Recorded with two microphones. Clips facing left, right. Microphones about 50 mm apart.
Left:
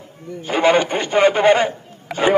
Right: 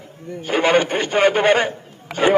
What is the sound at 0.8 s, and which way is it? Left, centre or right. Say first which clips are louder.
Speech: left 1 dB; right.